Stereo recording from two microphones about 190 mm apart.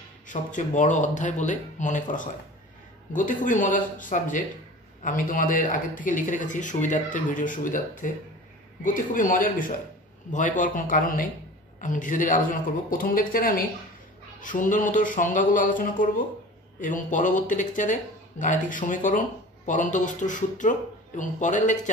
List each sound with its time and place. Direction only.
0.3 s a man's voice: 40° left (ahead or behind)